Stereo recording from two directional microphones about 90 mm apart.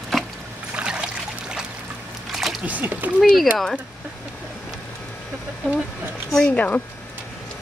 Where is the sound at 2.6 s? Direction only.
15° right (ahead or behind).